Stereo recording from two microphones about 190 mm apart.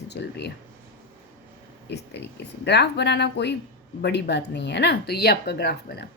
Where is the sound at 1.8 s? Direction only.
60° left (ahead or behind).